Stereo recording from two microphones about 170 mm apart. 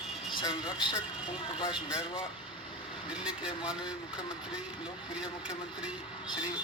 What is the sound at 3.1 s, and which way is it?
Speech, 5° right (ahead or behind).